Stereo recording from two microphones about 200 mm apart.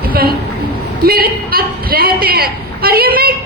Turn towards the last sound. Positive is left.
turn(degrees=-50)  # may be behind; listen again after turning